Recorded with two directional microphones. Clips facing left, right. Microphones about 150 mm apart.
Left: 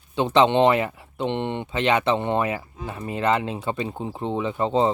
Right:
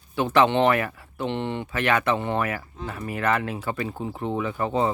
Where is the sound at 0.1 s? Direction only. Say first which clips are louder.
Left 2 dB; 20° left (ahead or behind).